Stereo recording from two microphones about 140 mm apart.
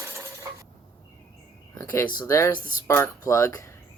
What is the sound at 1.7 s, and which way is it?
Speech, 20° left (ahead or behind).